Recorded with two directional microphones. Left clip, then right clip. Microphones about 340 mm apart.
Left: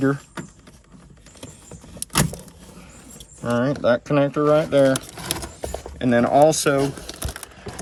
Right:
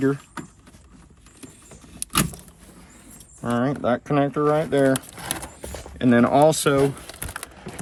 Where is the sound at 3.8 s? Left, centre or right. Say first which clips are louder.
Left 4 dB; centre.